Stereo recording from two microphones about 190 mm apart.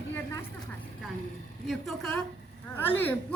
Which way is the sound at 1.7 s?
Centre (ahead or behind).